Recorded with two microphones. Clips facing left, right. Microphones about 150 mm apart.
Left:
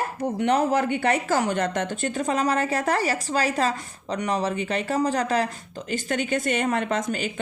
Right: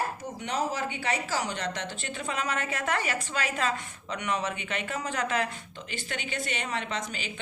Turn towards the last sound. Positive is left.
turn(degrees=45)  # may be behind; listen again after turning